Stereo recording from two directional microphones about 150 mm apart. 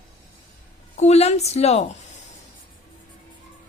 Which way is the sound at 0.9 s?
45° left (ahead or behind).